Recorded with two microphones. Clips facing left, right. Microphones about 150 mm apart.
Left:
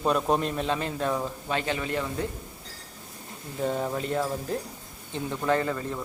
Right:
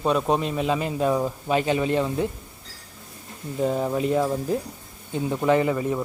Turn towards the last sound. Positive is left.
turn(degrees=-15)  # may be behind; listen again after turning